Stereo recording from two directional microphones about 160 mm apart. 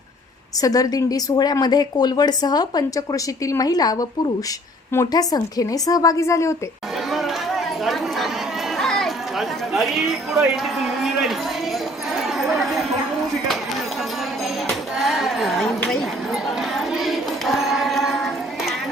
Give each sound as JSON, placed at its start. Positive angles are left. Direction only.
{"t": 0.6, "sound": "speech", "side_deg": 20}
{"t": 7.1, "sound": "run", "side_deg": 0}
{"t": 8.8, "sound": "chatter", "side_deg": 0}
{"t": 14.7, "sound": "a sound", "side_deg": 0}